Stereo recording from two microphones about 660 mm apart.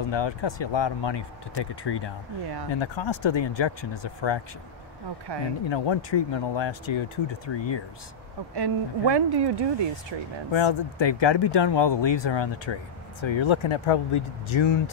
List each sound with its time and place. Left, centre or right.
0.1 s speech: left
5.7 s speech: left
8.5 s speech: right
10.5 s speech: left